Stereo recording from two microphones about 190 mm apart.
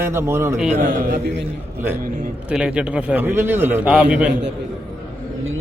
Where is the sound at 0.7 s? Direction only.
45° right (ahead or behind).